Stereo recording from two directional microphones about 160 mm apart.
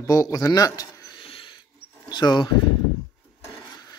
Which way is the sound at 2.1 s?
25° left (ahead or behind).